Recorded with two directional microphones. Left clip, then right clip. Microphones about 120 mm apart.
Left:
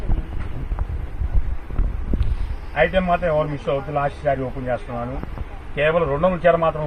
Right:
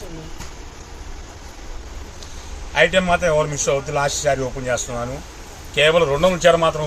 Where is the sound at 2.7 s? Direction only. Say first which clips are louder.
Right 3 dB; 30° right (ahead or behind).